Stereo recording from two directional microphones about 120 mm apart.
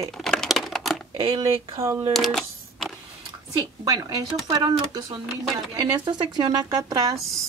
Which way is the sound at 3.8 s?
30° right (ahead or behind).